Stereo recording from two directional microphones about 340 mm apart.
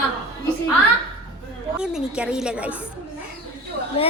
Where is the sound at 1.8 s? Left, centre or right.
Centre.